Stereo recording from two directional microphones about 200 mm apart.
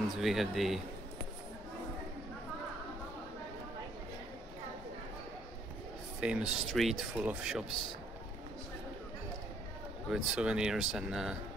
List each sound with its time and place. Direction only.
0.1 s speech: centre (ahead or behind)
6.2 s speech: 5° right (ahead or behind)
10.0 s speech: centre (ahead or behind)